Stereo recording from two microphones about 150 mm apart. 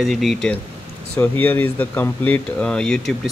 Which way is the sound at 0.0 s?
Centre (ahead or behind).